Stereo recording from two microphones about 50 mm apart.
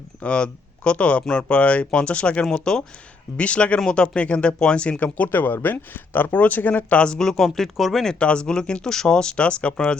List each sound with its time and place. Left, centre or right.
0.2 s speech: left
7.0 s speech: centre
8.2 s speech: centre